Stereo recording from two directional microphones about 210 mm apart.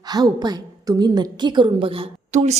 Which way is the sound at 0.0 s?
20° right (ahead or behind).